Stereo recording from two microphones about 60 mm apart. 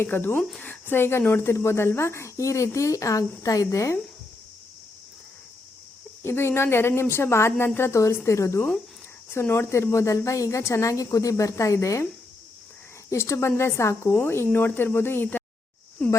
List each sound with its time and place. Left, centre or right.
0.0 s speech: left
6.2 s speech: left
9.3 s speech: left
13.1 s speech: left